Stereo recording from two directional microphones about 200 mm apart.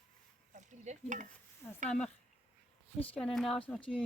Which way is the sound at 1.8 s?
5° left (ahead or behind).